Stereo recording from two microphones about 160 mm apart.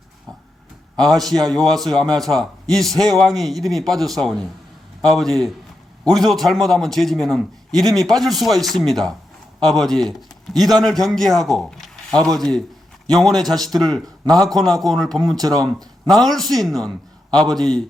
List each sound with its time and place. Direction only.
1.0 s a man's voice: centre (ahead or behind)
15.4 s speech: 25° right (ahead or behind)
16.0 s a man's voice: centre (ahead or behind)